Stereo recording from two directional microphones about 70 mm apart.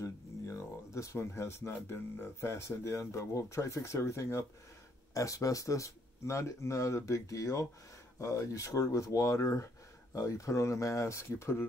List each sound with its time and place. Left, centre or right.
0.0 s speech: left
5.1 s speech: left